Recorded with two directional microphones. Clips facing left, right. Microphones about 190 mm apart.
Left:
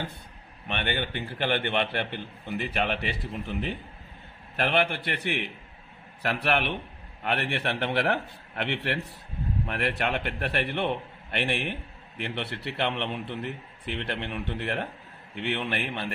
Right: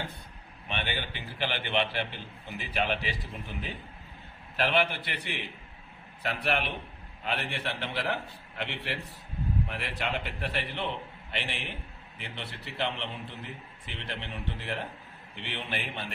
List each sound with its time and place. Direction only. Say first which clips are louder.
0.7 s a man's voice: left 5 dB; 55° left (ahead or behind)
4.5 s a man's voice: left 2 dB; 55° left (ahead or behind)